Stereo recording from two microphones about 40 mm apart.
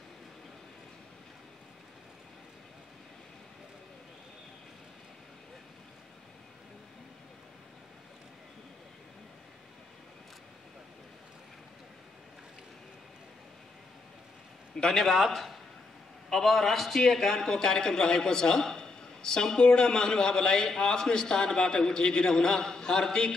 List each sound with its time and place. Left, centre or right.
14.8 s a man's voice: centre